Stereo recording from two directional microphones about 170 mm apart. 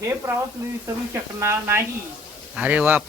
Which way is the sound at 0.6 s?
20° right (ahead or behind).